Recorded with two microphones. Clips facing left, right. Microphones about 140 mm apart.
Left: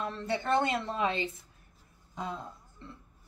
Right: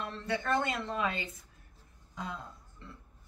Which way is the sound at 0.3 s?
25° left (ahead or behind).